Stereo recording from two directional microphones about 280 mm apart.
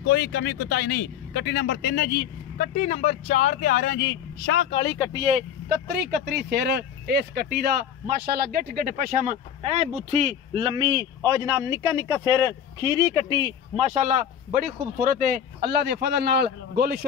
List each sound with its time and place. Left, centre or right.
0.0 s speech: left
5.1 s speech: right
5.7 s speech: right